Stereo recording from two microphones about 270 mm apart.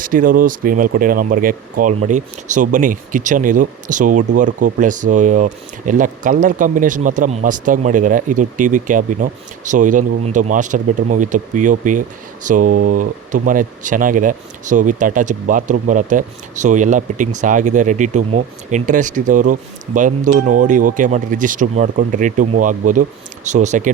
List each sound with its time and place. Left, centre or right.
0.0 s speech: right